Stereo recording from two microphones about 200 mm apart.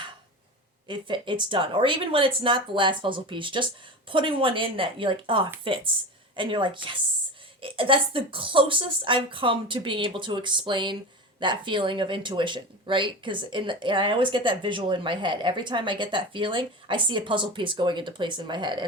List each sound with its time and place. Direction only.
0.9 s speech: 25° right (ahead or behind)